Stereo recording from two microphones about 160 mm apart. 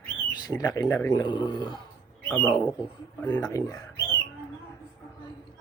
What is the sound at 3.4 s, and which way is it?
Speech, 20° left (ahead or behind).